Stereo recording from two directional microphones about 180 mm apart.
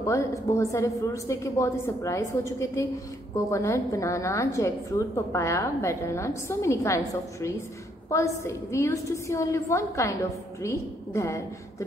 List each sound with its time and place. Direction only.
0.0 s a woman's voice: 15° left (ahead or behind)